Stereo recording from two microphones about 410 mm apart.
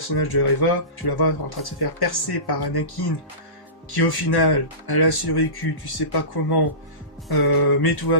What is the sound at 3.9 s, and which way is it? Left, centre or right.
Speech, left.